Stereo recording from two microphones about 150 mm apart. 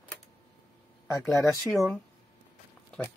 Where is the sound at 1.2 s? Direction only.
Centre (ahead or behind).